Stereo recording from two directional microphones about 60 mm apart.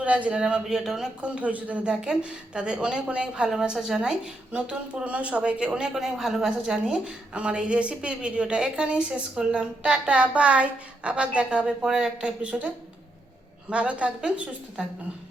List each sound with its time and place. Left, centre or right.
0.0 s a woman's voice: right
1.4 s a woman's voice: right
1.9 s a woman's voice: centre
5.9 s a woman's voice: centre